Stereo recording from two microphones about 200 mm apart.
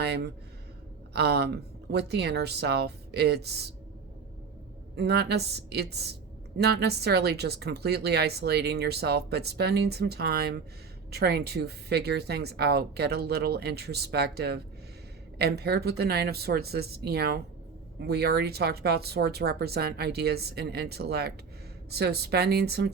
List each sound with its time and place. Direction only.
0.0 s a sound: 55° right (ahead or behind)
1.1 s a woman's voice: 55° right (ahead or behind)
4.9 s a woman's voice: 55° right (ahead or behind)